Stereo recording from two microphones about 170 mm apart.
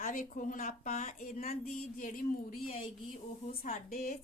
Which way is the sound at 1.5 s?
55° left (ahead or behind).